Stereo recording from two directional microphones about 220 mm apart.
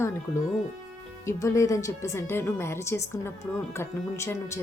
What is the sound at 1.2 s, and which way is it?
Speech, 15° left (ahead or behind).